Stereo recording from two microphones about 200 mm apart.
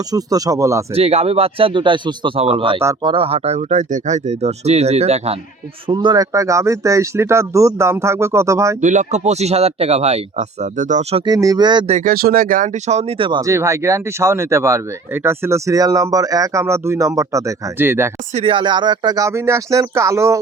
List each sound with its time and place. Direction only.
0.1 s speech: 20° right (ahead or behind)
0.9 s speech: 30° right (ahead or behind)
8.8 s speech: 40° right (ahead or behind)
11.3 s speech: 20° right (ahead or behind)
11.9 s speech: 45° right (ahead or behind); by 18.1 s 10° right (ahead or behind)
18.3 s speech: 25° right (ahead or behind)